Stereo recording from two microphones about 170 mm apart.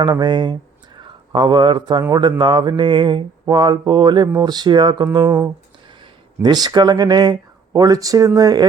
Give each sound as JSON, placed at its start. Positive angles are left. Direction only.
{"t": 0.0, "sound": "speech", "side_deg": -25}
{"t": 2.4, "sound": "mantra", "side_deg": -25}